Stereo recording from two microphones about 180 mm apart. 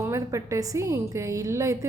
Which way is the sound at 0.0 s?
15° right (ahead or behind).